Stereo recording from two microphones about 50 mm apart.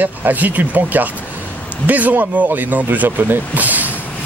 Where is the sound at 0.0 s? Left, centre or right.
Right.